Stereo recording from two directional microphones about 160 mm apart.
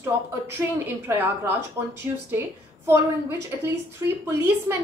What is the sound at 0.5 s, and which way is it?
A woman's voice, 15° right (ahead or behind).